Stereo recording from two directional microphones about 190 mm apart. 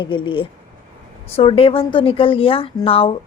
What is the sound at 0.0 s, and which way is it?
A woman's voice, 25° left (ahead or behind).